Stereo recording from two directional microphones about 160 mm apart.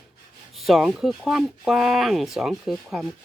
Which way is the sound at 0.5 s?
Centre (ahead or behind).